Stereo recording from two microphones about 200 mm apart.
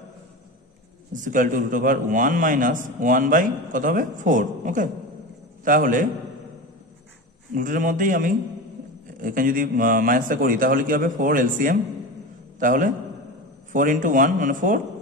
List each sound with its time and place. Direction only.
1.1 s a man's voice: 40° right (ahead or behind)
7.5 s a man's voice: 40° right (ahead or behind)